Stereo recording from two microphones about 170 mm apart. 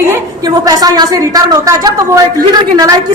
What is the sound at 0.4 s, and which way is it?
A woman's voice, 20° right (ahead or behind).